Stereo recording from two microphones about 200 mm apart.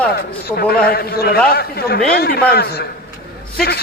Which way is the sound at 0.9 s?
50° left (ahead or behind).